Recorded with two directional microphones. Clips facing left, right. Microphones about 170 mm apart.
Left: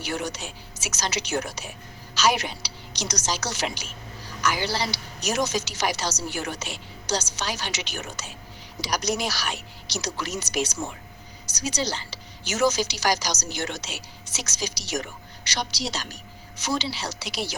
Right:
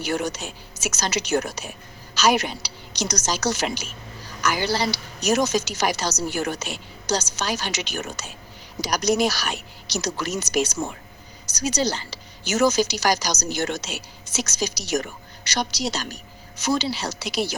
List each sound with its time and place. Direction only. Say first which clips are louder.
0.0 s a woman's voice: right 4 dB; 45° right (ahead or behind)